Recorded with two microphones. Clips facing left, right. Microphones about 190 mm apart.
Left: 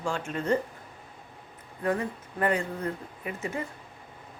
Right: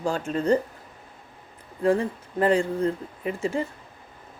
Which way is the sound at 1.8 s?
30° right (ahead or behind).